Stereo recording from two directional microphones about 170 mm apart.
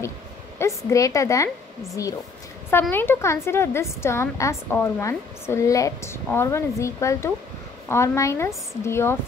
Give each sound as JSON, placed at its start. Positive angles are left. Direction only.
{"t": 0.6, "sound": "a woman's voice", "side_deg": 15}
{"t": 2.7, "sound": "a woman's voice", "side_deg": 10}